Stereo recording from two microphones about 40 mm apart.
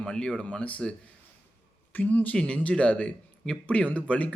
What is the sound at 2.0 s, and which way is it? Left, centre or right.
Speech, left.